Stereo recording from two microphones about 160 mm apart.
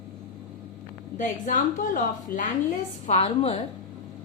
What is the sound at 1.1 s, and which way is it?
A woman's voice, 50° left (ahead or behind).